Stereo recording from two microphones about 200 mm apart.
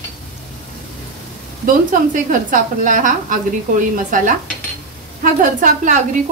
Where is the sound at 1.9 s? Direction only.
40° right (ahead or behind).